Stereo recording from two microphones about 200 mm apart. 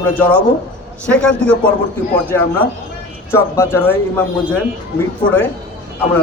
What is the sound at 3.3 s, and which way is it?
Speech, 10° left (ahead or behind).